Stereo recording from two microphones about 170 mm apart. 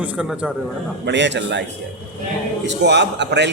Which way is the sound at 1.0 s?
90° right.